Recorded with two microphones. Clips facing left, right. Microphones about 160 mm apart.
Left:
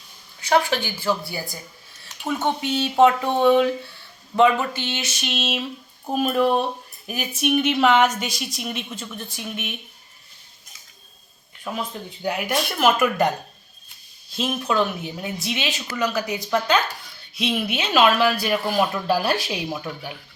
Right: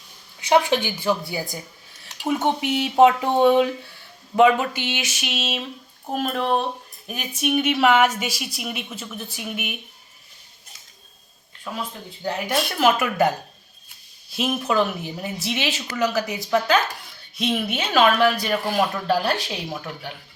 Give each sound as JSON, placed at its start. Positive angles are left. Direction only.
{"t": 0.3, "sound": "a woman's voice", "side_deg": -20}
{"t": 11.7, "sound": "speech", "side_deg": 20}
{"t": 12.8, "sound": "a woman's voice", "side_deg": 0}
{"t": 14.3, "sound": "a woman's voice", "side_deg": -5}